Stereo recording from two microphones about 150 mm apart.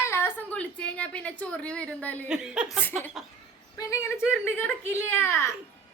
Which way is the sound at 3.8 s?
20° left (ahead or behind).